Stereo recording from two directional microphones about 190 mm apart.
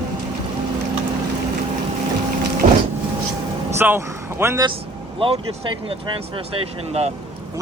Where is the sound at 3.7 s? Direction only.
10° right (ahead or behind).